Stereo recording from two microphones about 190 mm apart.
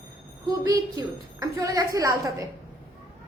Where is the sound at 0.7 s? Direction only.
20° right (ahead or behind).